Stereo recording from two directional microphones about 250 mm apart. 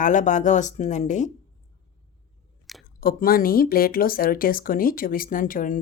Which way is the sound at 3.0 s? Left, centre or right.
Left.